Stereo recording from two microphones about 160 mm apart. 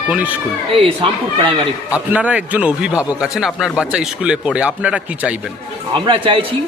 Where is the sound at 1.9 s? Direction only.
10° right (ahead or behind).